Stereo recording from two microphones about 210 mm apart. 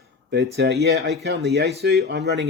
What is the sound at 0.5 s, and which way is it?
Speech, 50° right (ahead or behind).